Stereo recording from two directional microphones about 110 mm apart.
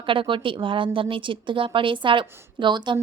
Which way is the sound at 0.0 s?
50° right (ahead or behind).